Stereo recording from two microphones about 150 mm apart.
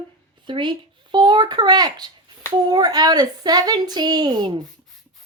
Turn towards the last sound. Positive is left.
turn(degrees=-30)  # may be behind; listen again after turning